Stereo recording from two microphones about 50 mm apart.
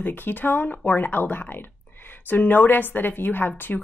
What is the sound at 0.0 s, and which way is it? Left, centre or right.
Speech, left.